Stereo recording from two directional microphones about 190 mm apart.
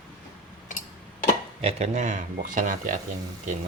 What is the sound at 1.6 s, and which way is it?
Speech, 35° right (ahead or behind).